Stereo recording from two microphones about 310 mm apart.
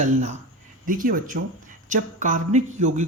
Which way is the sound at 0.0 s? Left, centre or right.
Right.